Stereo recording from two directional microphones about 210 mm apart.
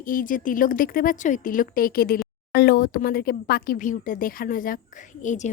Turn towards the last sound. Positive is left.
turn(degrees=35)  # may be behind; listen again after turning